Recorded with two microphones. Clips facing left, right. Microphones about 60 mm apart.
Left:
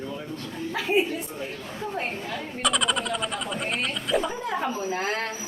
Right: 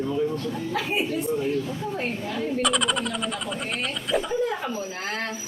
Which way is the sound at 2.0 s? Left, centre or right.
Centre.